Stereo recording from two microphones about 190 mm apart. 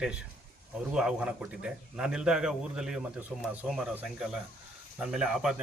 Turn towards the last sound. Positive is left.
turn(degrees=0)  # may be behind; listen again after turning